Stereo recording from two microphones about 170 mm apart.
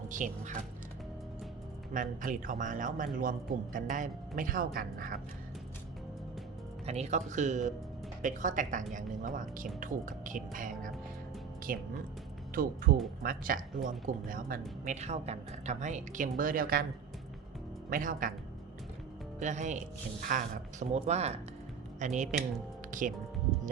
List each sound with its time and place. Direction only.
0.1 s speech: 45° right (ahead or behind)
1.9 s speech: 50° right (ahead or behind)
6.8 s speech: 40° right (ahead or behind); by 16.8 s 60° right (ahead or behind)
17.8 s speech: 55° right (ahead or behind)
19.4 s speech: 45° right (ahead or behind)